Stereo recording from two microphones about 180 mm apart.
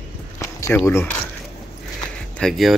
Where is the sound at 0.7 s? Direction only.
10° left (ahead or behind).